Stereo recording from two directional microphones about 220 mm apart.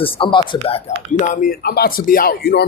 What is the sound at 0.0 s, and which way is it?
Speech, 25° left (ahead or behind).